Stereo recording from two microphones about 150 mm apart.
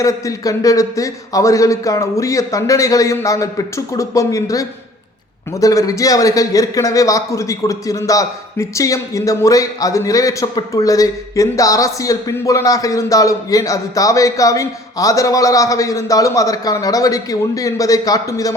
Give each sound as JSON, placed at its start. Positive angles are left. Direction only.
{"t": 0.0, "sound": "a man's voice", "side_deg": 20}